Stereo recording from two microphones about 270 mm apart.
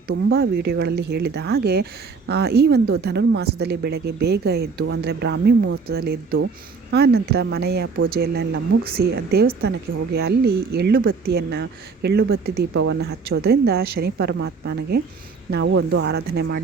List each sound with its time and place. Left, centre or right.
0.1 s speech: right